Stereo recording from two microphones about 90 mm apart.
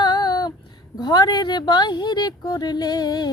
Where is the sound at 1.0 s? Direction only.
50° left (ahead or behind).